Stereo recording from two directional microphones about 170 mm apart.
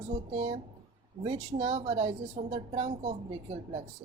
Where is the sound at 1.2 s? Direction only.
35° right (ahead or behind).